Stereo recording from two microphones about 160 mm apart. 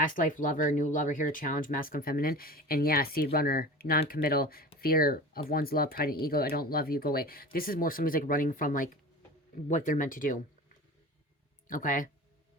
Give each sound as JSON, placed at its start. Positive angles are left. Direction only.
{"t": 0.0, "sound": "speech", "side_deg": 55}
{"t": 11.7, "sound": "speech", "side_deg": 55}